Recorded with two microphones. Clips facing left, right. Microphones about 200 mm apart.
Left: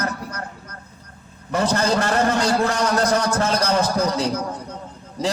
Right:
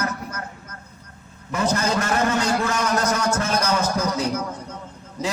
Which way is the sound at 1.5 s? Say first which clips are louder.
Left 2 dB; 35° left (ahead or behind).